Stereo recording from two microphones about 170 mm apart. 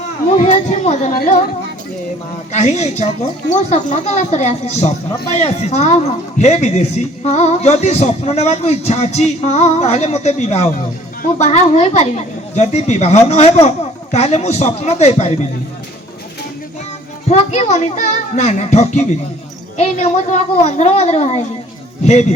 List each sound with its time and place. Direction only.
0.3 s speech: 45° left (ahead or behind)
1.1 s speech: 60° left (ahead or behind)
2.5 s speech: 40° left (ahead or behind)
17.2 s speech: 40° left (ahead or behind)